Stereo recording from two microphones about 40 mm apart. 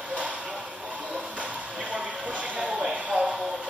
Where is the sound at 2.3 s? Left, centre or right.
Right.